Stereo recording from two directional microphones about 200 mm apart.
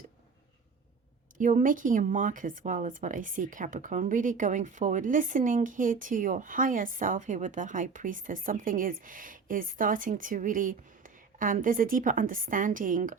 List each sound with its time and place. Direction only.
1.4 s speech: 40° right (ahead or behind)